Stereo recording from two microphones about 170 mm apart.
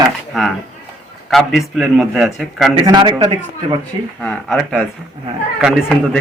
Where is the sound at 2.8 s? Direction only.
25° right (ahead or behind).